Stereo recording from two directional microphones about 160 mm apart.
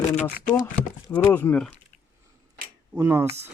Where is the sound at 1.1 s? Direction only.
10° left (ahead or behind).